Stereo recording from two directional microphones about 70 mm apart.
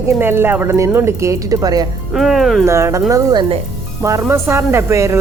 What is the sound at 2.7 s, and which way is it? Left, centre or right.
Speech, right.